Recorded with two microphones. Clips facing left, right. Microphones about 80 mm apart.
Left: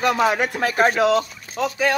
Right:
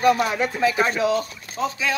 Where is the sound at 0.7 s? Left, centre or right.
Left.